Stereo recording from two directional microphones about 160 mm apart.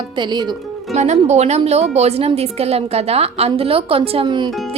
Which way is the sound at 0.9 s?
45° right (ahead or behind).